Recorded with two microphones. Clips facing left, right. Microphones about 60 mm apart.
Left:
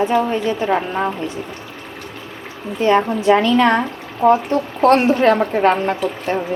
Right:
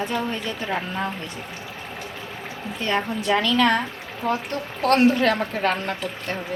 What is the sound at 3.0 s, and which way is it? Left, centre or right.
Speech, left.